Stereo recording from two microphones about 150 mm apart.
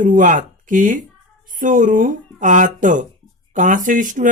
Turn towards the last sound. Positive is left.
turn(degrees=-60)  # may be behind; listen again after turning